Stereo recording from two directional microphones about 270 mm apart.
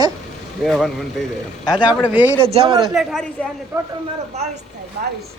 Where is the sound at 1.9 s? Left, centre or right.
Centre.